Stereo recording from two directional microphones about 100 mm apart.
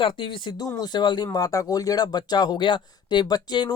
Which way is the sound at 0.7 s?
45° left (ahead or behind).